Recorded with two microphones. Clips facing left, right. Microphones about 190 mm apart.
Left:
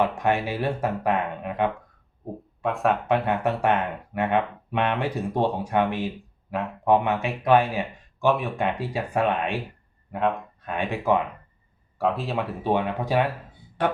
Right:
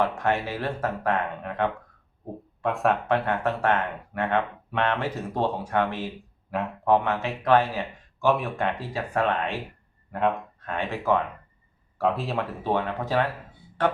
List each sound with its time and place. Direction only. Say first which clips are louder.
0.0 s speech: left 2 dB; 15° left (ahead or behind)
2.6 s speech: even; centre (ahead or behind)
3.1 s speech: left 2 dB; 15° left (ahead or behind)
6.5 s speech: even; centre (ahead or behind)
6.8 s speech: left 2 dB; 15° left (ahead or behind)
8.3 s speech: even; centre (ahead or behind)
8.5 s speech: left 2 dB; 15° left (ahead or behind)
10.1 s speech: even; centre (ahead or behind)
10.7 s speech: left 2 dB; 15° left (ahead or behind)
11.9 s speech: even; centre (ahead or behind)
12.6 s speech: left 3 dB; 15° left (ahead or behind)